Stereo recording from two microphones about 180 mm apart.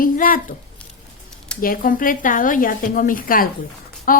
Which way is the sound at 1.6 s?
50° left (ahead or behind).